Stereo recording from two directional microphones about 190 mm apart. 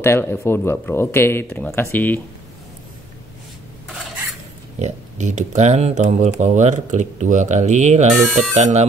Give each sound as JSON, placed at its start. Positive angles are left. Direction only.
{"t": 0.0, "sound": "speech", "side_deg": 15}
{"t": 4.7, "sound": "speech", "side_deg": -40}
{"t": 8.2, "sound": "speech", "side_deg": -5}
{"t": 8.5, "sound": "speech", "side_deg": -35}